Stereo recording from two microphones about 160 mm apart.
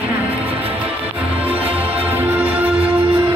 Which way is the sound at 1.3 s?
10° right (ahead or behind).